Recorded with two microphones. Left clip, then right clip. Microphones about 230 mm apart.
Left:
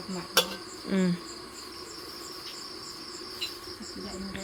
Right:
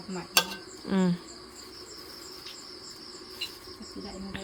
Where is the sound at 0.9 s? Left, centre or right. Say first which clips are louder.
Right 1 dB; centre.